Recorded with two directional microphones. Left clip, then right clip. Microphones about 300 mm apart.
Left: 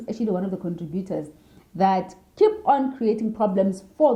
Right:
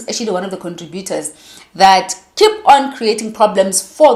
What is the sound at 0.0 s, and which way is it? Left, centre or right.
Speech, centre.